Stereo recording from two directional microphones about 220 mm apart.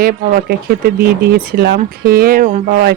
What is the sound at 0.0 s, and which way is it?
Speech, 40° right (ahead or behind).